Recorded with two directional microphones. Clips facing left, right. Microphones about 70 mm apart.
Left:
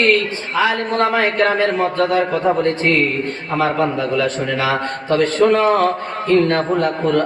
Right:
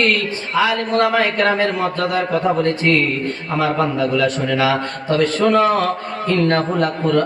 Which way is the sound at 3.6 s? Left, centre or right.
Left.